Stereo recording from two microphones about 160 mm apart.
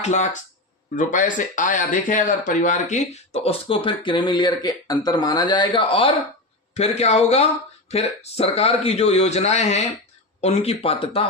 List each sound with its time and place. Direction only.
0.0 s speech: 45° left (ahead or behind)